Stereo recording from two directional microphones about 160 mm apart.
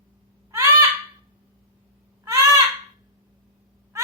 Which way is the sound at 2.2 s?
15° right (ahead or behind).